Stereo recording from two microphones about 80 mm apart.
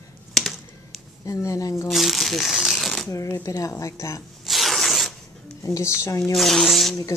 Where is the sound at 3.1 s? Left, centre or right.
Left.